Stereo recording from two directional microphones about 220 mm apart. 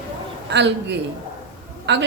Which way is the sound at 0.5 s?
50° right (ahead or behind).